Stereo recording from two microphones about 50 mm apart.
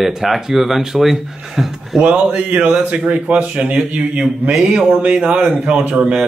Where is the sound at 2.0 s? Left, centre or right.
Right.